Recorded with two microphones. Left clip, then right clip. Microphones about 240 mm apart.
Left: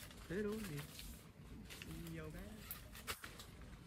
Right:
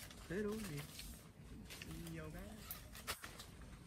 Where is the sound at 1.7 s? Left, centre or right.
Centre.